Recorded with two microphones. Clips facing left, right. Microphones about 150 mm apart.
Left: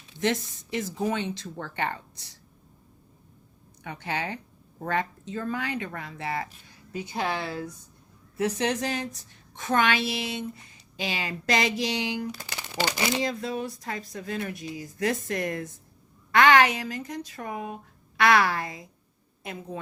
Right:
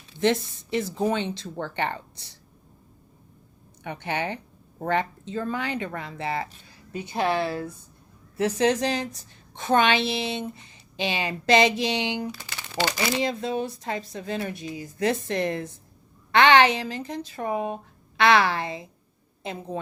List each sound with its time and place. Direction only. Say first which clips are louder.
0.2 s a woman's voice: right 4 dB; 30° right (ahead or behind)
3.8 s a woman's voice: right 3 dB; 25° right (ahead or behind)
8.4 s a woman's voice: right 4 dB; 30° right (ahead or behind)
12.5 s crumpling: right 4 dB; 15° left (ahead or behind)
13.2 s a woman's voice: right 3 dB; 25° right (ahead or behind)